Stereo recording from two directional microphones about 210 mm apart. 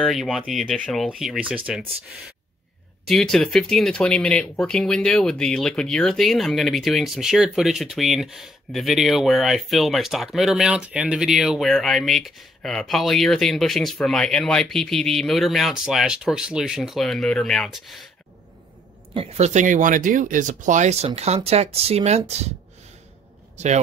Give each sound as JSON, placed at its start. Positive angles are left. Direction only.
{"t": 0.0, "sound": "speech", "side_deg": 0}
{"t": 3.1, "sound": "speech", "side_deg": 0}
{"t": 19.1, "sound": "speech", "side_deg": -30}
{"t": 23.6, "sound": "speech", "side_deg": -35}